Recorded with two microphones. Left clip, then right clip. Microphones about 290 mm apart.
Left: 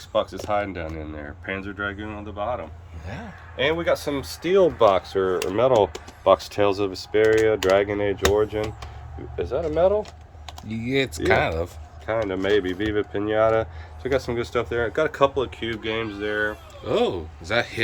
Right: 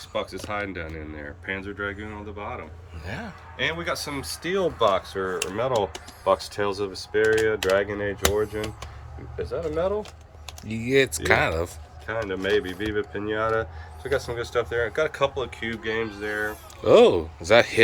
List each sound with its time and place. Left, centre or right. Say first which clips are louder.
0.2 s speech: left 6 dB; centre
3.1 s speech: right 2 dB; centre
3.6 s speech: left 5 dB; left
10.7 s speech: right 3 dB; centre
12.3 s speech: even; left
16.8 s speech: right 8 dB; centre